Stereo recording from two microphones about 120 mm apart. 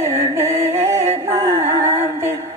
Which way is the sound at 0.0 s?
20° right (ahead or behind).